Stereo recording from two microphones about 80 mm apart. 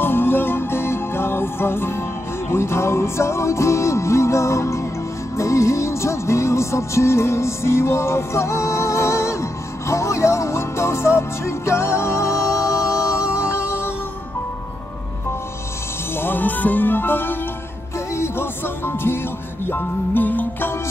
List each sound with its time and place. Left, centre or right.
0.0 s music: left
16.2 s speech: left
18.1 s music: left